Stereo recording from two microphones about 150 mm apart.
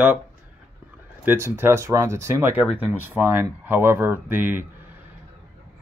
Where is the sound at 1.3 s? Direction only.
15° right (ahead or behind).